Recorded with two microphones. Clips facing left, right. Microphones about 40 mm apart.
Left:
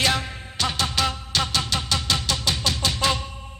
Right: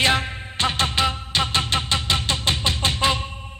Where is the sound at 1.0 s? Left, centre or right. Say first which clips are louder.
Right 2 dB; right.